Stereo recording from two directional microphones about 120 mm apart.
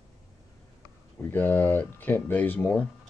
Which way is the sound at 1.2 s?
15° left (ahead or behind).